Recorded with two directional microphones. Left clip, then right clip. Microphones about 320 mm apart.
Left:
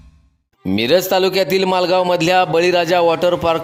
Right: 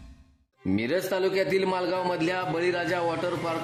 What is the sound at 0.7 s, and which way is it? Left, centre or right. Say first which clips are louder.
A man's voice: left 12 dB; left.